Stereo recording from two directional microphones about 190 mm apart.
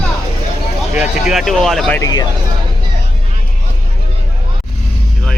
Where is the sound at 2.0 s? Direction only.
20° left (ahead or behind).